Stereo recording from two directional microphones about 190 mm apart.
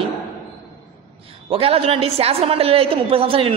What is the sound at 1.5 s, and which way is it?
A woman's voice, 30° right (ahead or behind).